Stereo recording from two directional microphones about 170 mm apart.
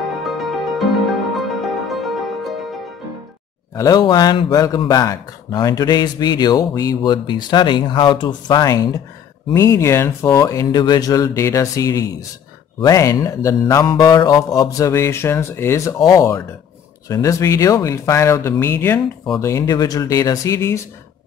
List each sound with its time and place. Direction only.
0.0 s music: centre (ahead or behind)
3.7 s speech: 20° left (ahead or behind)